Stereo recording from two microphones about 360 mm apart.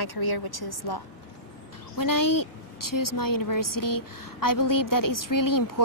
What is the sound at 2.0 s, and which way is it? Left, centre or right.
A woman's voice, left.